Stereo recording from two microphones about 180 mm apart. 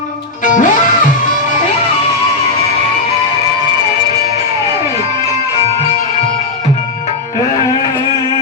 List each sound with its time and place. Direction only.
0.4 s music: 45° left (ahead or behind)